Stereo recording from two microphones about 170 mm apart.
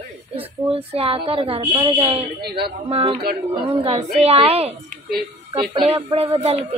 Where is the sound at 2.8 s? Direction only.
35° right (ahead or behind).